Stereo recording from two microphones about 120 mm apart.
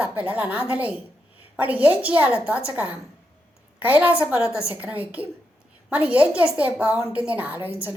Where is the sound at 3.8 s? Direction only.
15° right (ahead or behind).